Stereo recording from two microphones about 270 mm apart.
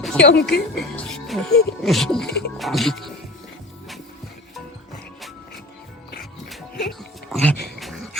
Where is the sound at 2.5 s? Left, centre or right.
Centre.